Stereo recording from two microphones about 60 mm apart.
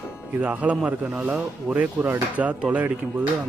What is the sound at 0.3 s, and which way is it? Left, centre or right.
Speech, right.